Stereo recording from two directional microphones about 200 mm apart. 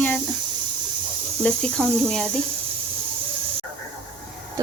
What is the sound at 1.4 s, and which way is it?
Speech, 5° left (ahead or behind).